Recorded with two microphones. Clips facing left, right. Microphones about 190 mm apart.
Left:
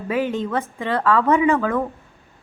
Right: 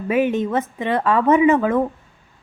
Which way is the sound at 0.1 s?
20° right (ahead or behind).